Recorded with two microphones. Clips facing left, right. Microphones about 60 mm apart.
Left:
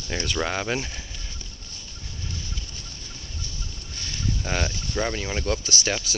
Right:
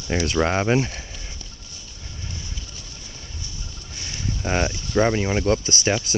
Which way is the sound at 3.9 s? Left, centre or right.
Centre.